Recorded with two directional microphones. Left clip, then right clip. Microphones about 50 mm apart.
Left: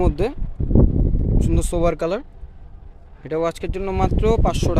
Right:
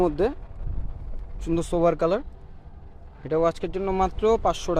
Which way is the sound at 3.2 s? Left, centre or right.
Left.